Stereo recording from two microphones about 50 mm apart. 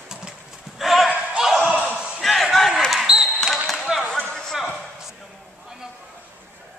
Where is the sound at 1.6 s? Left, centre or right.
Right.